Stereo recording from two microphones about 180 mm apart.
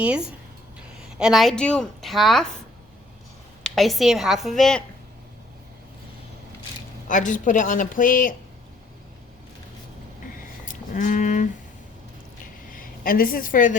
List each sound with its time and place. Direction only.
0.0 s a woman's voice: 5° right (ahead or behind)
3.6 s a woman's voice: centre (ahead or behind)
7.1 s speech: 45° left (ahead or behind)
10.7 s speech: 45° left (ahead or behind)
12.7 s speech: 50° left (ahead or behind)